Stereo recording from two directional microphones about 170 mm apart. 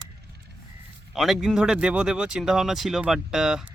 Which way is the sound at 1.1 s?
Centre (ahead or behind).